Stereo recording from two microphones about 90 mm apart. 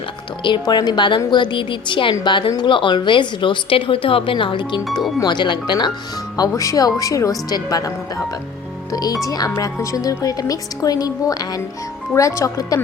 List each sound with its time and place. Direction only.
0.6 s a woman's voice: 50° left (ahead or behind)
6.3 s speech: 40° left (ahead or behind)